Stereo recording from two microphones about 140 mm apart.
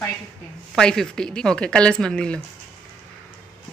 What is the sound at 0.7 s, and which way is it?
A woman's voice, 5° left (ahead or behind).